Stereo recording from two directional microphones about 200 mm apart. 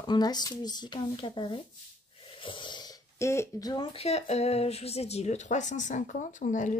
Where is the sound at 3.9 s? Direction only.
30° left (ahead or behind).